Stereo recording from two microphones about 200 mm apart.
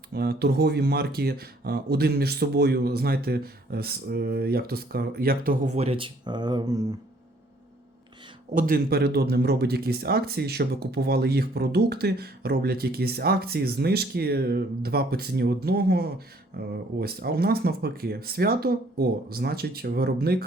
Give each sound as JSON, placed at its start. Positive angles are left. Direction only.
{"t": 0.1, "sound": "speech", "side_deg": -50}
{"t": 8.5, "sound": "speech", "side_deg": -45}